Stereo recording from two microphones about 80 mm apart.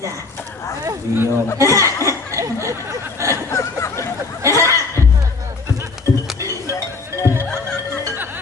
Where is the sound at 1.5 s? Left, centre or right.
Right.